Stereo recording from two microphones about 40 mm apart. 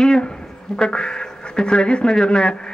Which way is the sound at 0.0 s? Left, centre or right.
Centre.